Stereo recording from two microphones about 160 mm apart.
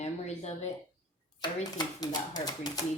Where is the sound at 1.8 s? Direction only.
25° left (ahead or behind).